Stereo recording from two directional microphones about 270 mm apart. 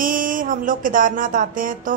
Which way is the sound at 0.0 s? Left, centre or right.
Right.